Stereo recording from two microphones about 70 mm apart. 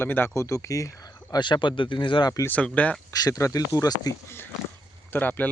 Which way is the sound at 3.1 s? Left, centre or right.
Left.